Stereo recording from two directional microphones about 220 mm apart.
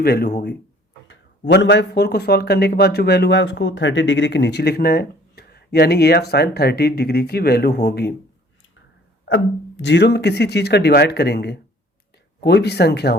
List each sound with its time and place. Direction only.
0.0 s speech: 45° left (ahead or behind)
9.2 s speech: 55° left (ahead or behind)